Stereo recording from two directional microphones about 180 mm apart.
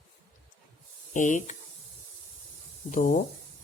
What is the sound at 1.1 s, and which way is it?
Speech, 45° left (ahead or behind).